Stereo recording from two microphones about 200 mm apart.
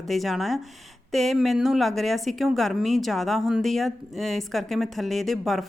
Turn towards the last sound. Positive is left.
turn(degrees=0)  # may be behind; listen again after turning